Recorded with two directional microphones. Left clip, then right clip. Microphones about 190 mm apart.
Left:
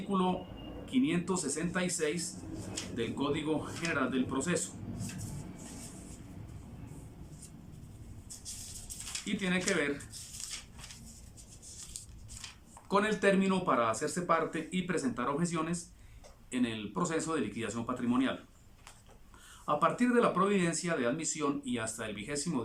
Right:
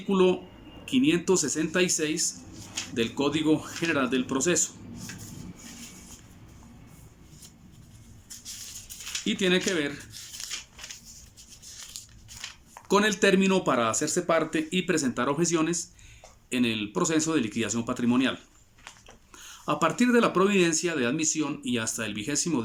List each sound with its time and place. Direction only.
0.1 s speech: 20° right (ahead or behind)
9.2 s speech: 20° right (ahead or behind)
11.6 s a sound: 45° right (ahead or behind)
12.9 s speech: 20° right (ahead or behind)
19.6 s speech: 20° right (ahead or behind)